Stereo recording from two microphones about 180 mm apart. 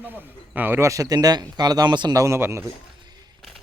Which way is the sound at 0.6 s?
10° right (ahead or behind).